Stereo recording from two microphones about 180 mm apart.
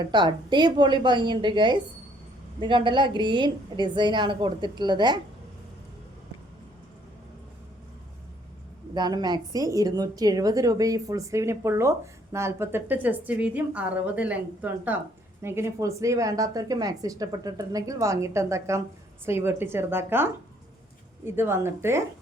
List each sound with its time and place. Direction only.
0.0 s a woman's voice: 25° right (ahead or behind)
9.0 s a woman's voice: 25° right (ahead or behind)